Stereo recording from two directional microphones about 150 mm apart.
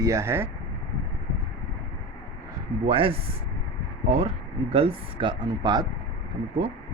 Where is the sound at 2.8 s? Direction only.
40° right (ahead or behind).